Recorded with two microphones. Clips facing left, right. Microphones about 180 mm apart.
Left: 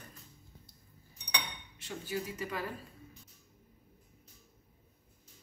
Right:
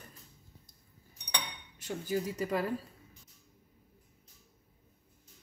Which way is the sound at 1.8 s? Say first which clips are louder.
Right 5 dB; 45° right (ahead or behind).